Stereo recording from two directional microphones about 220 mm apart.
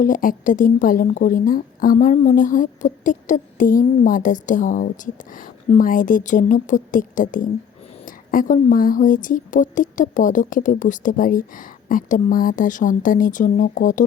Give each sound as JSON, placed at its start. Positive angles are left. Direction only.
{"t": 0.0, "sound": "a woman's voice", "side_deg": 40}